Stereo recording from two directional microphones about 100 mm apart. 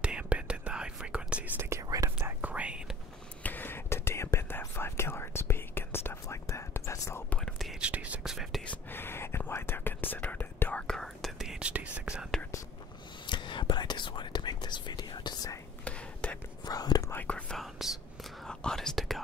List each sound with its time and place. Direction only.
0.0 s whispering: 10° right (ahead or behind)
1.6 s whispering: 30° right (ahead or behind)
2.2 s whispering: 15° right (ahead or behind)
3.4 s whispering: 20° left (ahead or behind)
7.3 s whispering: 5° left (ahead or behind)
7.8 s whispering: 15° right (ahead or behind)
8.6 s whispering: 20° left (ahead or behind); by 12.3 s 10° right (ahead or behind)
13.3 s whispering: 55° left (ahead or behind)
15.8 s whispering: 10° left (ahead or behind)
16.6 s whispering: 40° left (ahead or behind)
17.1 s whispering: 15° left (ahead or behind)
17.6 s whispering: 5° right (ahead or behind)